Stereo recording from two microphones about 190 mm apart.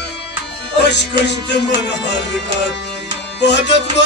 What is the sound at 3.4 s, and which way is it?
Music, 65° left (ahead or behind).